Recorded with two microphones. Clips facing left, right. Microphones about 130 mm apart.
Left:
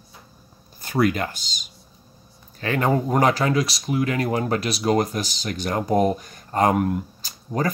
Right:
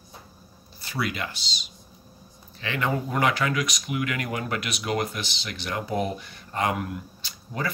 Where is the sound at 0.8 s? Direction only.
45° left (ahead or behind).